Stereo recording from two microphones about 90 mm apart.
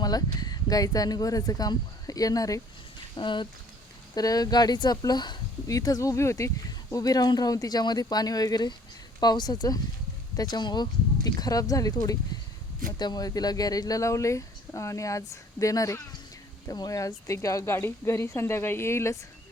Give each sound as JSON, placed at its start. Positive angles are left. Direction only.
{"t": 0.0, "sound": "speech", "side_deg": 50}
{"t": 3.2, "sound": "speech", "side_deg": 60}
{"t": 4.1, "sound": "speech", "side_deg": 45}
{"t": 5.6, "sound": "speech", "side_deg": 40}